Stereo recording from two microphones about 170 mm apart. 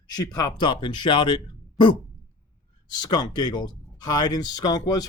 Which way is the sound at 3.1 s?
25° left (ahead or behind).